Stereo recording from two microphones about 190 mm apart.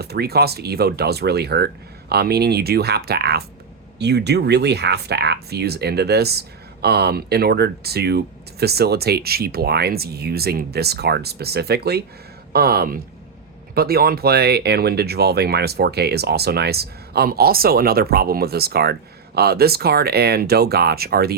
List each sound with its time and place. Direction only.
0.0 s speech: 55° right (ahead or behind)